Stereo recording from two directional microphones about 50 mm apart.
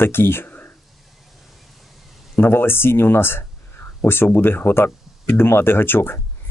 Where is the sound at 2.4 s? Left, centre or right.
Left.